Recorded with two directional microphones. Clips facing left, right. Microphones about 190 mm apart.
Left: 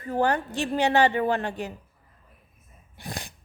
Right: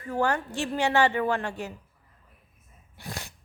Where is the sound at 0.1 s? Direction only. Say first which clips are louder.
Left 2 dB; 20° left (ahead or behind).